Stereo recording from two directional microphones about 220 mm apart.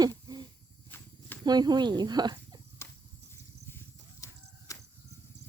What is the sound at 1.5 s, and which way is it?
Speech, 20° right (ahead or behind).